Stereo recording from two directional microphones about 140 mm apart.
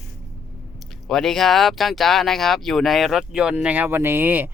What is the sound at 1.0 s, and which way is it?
Speech, centre (ahead or behind).